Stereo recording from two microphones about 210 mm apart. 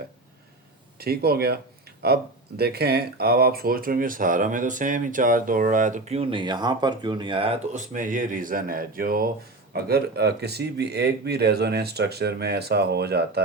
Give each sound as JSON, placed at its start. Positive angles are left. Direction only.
{"t": 0.9, "sound": "speech", "side_deg": -50}